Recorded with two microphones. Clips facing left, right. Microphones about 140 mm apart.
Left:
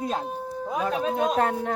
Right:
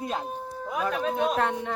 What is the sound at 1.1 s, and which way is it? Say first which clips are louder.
Speech: left 3 dB; 40° left (ahead or behind).